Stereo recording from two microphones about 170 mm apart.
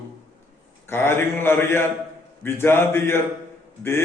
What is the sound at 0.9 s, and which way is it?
A man's voice, 15° left (ahead or behind).